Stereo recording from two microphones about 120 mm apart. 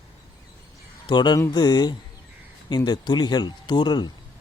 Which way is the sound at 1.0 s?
40° left (ahead or behind).